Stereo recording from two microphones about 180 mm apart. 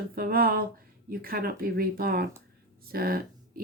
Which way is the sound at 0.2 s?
55° right (ahead or behind).